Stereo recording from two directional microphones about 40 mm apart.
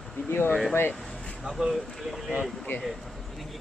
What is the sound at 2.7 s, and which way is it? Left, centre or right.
Speech, left.